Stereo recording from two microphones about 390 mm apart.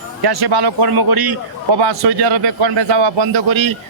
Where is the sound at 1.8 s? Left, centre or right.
Right.